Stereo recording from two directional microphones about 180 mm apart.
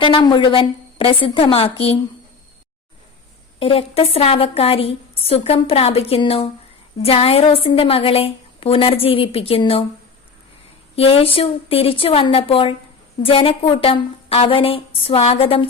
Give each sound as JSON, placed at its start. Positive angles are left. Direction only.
{"t": 0.0, "sound": "a woman's voice", "side_deg": 25}
{"t": 3.6, "sound": "a woman's voice", "side_deg": 30}
{"t": 10.9, "sound": "a woman's voice", "side_deg": 30}